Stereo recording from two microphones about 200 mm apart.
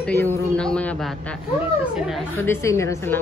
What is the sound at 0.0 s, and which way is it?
Speech, 10° left (ahead or behind).